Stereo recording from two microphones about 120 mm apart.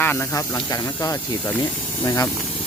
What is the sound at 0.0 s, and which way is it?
Speech, 15° left (ahead or behind).